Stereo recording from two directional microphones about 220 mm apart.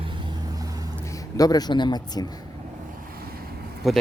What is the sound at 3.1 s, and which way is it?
Vehicle, 45° right (ahead or behind).